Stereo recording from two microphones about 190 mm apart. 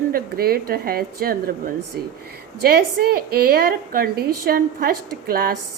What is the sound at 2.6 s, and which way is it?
A woman's voice, 55° right (ahead or behind).